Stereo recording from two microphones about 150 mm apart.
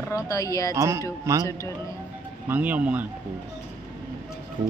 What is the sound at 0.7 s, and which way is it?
Speech, 20° right (ahead or behind).